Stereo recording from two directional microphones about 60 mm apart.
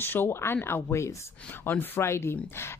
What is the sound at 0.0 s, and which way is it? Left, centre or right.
Speech, left.